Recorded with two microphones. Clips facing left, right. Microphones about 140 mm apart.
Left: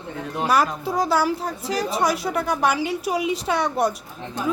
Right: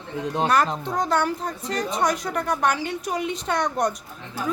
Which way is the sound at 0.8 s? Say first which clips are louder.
Left 2 dB; 10° left (ahead or behind).